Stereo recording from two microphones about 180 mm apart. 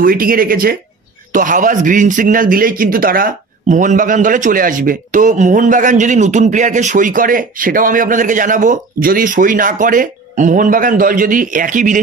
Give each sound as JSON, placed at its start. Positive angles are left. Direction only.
{"t": 0.0, "sound": "a man's voice", "side_deg": -55}